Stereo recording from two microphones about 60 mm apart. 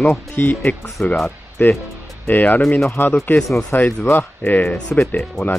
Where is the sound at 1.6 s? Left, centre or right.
Left.